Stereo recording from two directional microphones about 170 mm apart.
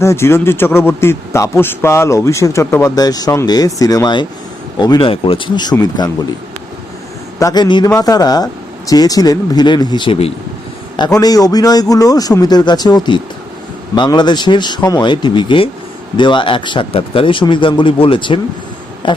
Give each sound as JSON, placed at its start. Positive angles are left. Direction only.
{"t": 0.0, "sound": "a man's voice", "side_deg": 15}
{"t": 7.3, "sound": "a man's voice", "side_deg": 20}
{"t": 10.9, "sound": "a man's voice", "side_deg": 25}
{"t": 19.0, "sound": "a sound", "side_deg": 30}